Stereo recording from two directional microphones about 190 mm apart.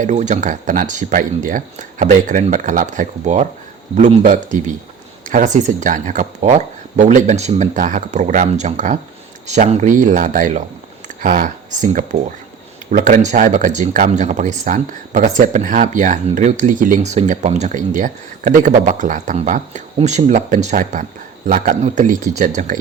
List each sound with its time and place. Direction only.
0.0 s speech: 40° right (ahead or behind)